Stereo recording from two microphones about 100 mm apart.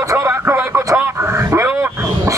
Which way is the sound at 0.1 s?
25° right (ahead or behind).